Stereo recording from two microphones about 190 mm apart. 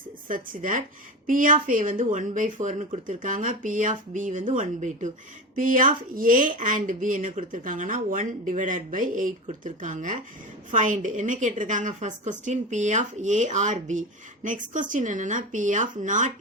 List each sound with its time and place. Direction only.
0.3 s a woman's voice: 45° right (ahead or behind)